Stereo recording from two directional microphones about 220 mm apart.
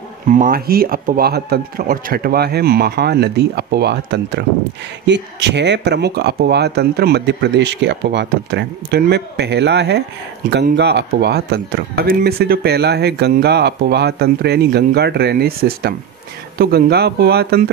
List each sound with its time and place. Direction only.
0.3 s speech: 40° right (ahead or behind)